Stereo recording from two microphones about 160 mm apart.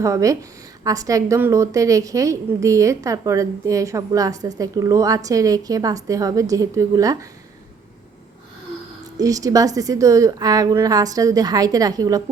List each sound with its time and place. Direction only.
0.0 s a woman's voice: 20° right (ahead or behind)
9.1 s a woman's voice: 20° right (ahead or behind)